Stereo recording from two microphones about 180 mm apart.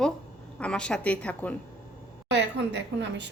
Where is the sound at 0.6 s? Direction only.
5° left (ahead or behind).